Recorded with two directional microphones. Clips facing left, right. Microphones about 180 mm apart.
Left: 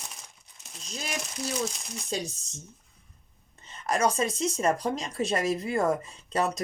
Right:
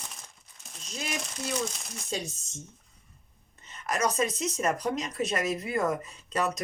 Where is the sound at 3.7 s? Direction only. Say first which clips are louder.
Left 3 dB; 30° left (ahead or behind).